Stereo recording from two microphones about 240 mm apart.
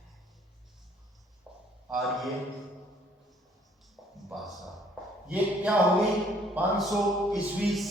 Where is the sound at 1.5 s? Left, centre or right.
Centre.